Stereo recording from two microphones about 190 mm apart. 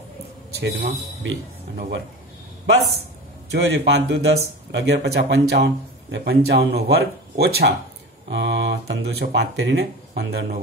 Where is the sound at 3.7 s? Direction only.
60° right (ahead or behind).